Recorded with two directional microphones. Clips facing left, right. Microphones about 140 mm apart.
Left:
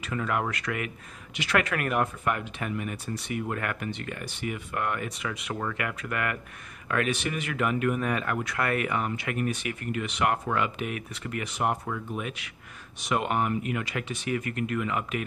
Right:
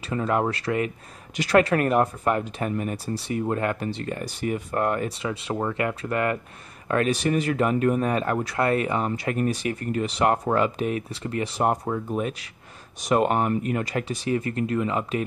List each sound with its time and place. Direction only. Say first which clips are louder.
0.0 s speech: right 5 dB; 30° right (ahead or behind)